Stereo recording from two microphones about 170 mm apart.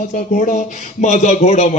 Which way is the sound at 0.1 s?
50° left (ahead or behind).